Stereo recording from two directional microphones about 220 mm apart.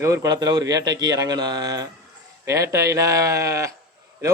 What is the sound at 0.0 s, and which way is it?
Speech, 15° right (ahead or behind).